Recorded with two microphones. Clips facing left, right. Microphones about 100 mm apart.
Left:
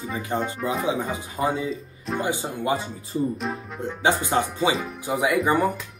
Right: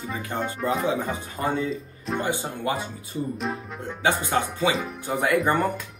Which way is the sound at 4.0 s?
20° left (ahead or behind).